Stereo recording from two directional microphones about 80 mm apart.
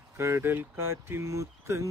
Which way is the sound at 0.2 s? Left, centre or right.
Right.